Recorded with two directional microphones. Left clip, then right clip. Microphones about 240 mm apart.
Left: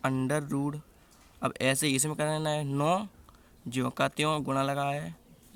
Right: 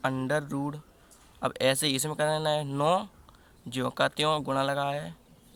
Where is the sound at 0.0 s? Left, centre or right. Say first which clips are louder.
Right 1 dB; left.